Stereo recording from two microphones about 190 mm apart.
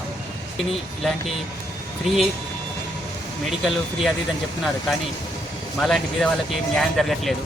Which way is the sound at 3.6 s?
Centre (ahead or behind).